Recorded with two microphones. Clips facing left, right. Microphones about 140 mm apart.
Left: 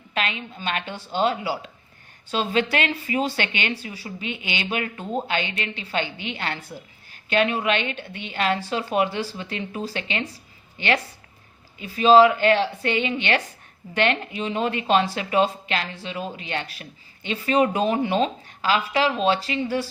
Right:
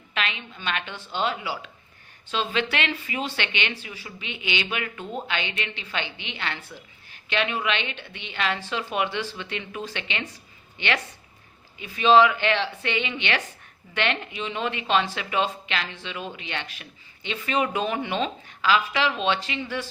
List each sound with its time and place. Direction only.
0.1 s speech: 40° left (ahead or behind)